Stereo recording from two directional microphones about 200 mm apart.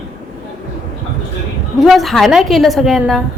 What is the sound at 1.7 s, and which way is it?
A woman's voice, centre (ahead or behind).